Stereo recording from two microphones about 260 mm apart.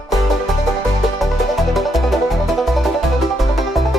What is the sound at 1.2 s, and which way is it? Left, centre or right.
Music, centre.